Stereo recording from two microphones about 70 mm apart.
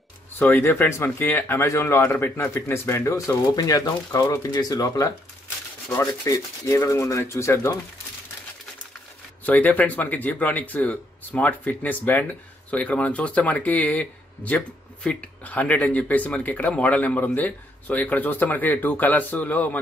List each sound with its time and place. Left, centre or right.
0.3 s speech: left
3.4 s speech: left
6.2 s speech: left
9.5 s speech: left